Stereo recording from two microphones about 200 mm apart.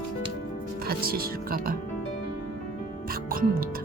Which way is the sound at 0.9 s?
50° right (ahead or behind).